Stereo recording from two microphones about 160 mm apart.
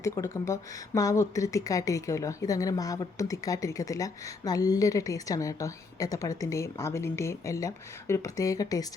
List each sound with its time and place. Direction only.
0.0 s speech: 20° left (ahead or behind)